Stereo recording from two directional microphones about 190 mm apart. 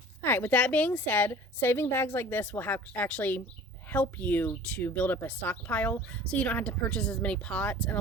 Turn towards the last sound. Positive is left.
turn(degrees=5)  # may be behind; listen again after turning